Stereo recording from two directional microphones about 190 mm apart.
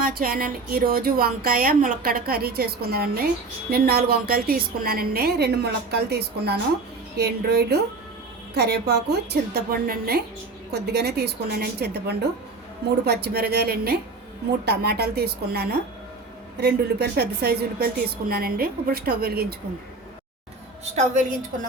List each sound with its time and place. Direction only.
0.0 s a woman's voice: 50° right (ahead or behind)